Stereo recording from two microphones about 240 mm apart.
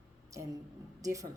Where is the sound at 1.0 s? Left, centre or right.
Centre.